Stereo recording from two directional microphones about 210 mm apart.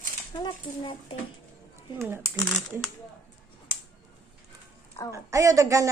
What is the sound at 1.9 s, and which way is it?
Speech, 10° right (ahead or behind).